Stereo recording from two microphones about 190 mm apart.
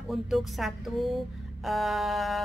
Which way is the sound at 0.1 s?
Centre (ahead or behind).